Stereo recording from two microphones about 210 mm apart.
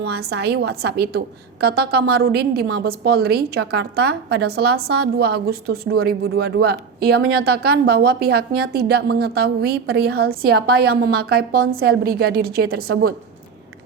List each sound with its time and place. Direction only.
0.0 s a woman's voice: 50° right (ahead or behind)